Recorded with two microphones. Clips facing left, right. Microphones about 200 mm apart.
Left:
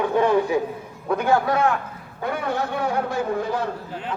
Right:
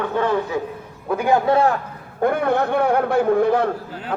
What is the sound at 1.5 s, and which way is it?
Speech, 30° right (ahead or behind).